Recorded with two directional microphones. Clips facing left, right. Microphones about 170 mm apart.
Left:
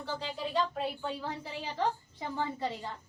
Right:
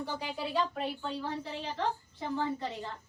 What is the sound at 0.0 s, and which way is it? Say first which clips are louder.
Speech: right 1 dB; 15° right (ahead or behind).